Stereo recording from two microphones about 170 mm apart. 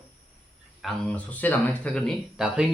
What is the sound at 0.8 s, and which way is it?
Speech, 5° left (ahead or behind).